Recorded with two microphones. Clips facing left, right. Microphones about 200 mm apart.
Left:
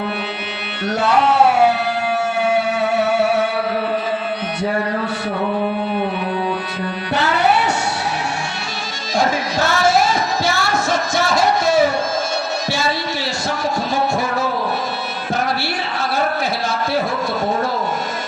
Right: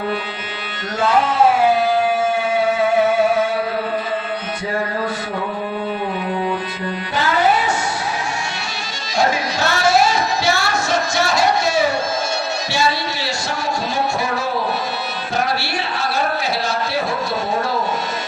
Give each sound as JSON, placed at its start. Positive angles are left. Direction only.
{"t": 0.9, "sound": "singing", "side_deg": 70}
{"t": 7.2, "sound": "music", "side_deg": 70}
{"t": 9.1, "sound": "music", "side_deg": 50}